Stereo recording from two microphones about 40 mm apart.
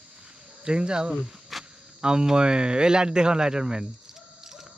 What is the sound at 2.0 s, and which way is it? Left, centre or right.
Speech, centre.